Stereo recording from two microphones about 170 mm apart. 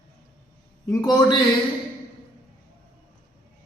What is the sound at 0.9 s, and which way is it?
Speech, 25° left (ahead or behind).